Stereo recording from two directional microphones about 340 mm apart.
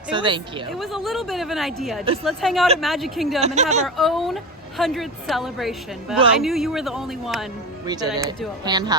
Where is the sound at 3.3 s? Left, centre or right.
Centre.